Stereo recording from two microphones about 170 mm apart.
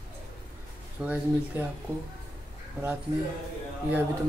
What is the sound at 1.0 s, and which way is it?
Speech, 10° right (ahead or behind).